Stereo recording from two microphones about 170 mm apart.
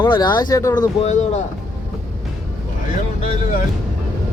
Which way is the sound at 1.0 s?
45° left (ahead or behind).